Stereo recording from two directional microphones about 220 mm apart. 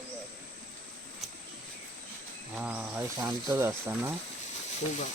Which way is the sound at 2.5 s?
5° right (ahead or behind).